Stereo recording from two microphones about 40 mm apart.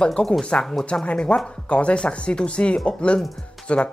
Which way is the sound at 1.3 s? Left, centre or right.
Left.